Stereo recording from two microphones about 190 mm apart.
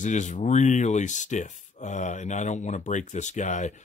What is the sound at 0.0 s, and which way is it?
Speech, 40° left (ahead or behind).